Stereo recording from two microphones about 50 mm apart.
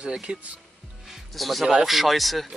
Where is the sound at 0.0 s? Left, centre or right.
Centre.